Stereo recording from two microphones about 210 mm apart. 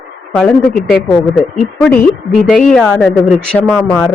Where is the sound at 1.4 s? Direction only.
5° left (ahead or behind).